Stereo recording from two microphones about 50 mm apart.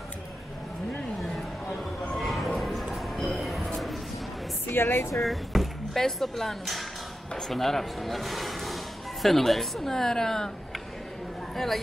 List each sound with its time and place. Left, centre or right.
2.1 s a sound: centre
4.6 s speech: left
5.2 s speech: centre
11.5 s a woman's voice: centre